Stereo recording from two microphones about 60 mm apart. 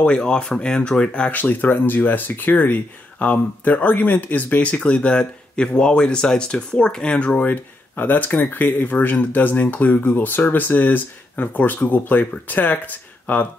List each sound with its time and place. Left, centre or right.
0.0 s speech: centre
1.3 s speech: left